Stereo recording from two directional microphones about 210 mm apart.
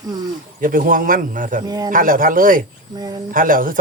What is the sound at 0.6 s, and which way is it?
Speech, 40° right (ahead or behind).